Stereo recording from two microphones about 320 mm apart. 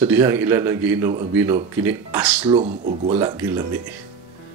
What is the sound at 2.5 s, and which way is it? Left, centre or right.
Speech, centre.